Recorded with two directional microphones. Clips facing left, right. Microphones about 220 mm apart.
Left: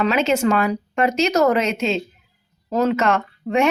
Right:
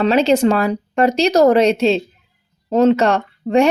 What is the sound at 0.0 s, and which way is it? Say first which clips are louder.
Speech: right 5 dB; 35° right (ahead or behind).